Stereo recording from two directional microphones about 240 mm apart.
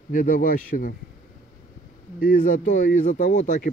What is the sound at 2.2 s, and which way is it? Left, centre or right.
Speech, left.